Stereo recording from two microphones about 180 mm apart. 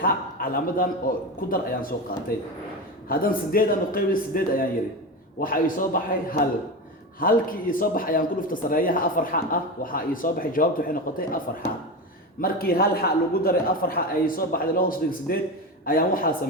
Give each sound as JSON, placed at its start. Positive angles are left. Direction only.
{"t": 0.0, "sound": "a man's voice", "side_deg": 55}